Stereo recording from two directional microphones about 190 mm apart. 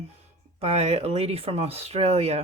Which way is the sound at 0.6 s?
35° right (ahead or behind).